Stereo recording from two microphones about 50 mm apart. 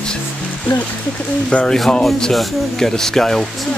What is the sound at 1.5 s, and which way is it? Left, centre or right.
Speech, left.